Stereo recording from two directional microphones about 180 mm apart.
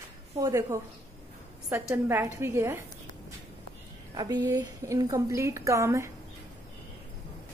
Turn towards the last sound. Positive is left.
turn(degrees=-15)  # may be behind; listen again after turning